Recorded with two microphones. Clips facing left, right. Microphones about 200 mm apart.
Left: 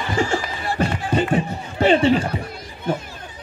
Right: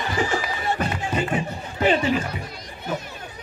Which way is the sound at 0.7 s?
30° left (ahead or behind).